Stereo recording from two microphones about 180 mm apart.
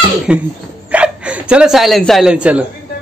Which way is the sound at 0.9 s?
5° right (ahead or behind).